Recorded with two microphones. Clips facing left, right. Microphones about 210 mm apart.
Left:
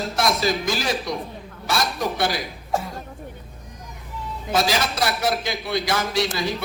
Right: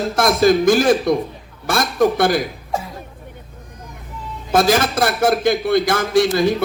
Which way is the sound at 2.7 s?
Centre (ahead or behind).